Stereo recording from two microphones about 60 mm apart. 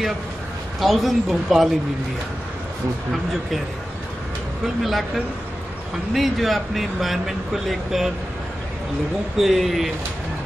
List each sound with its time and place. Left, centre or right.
0.7 s speech: centre
4.8 s speech: centre
9.4 s speech: centre